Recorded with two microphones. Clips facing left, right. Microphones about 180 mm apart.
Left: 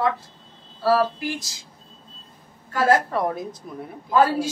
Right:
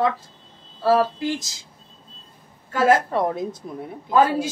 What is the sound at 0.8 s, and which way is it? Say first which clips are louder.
Speech: right 2 dB; 25° right (ahead or behind).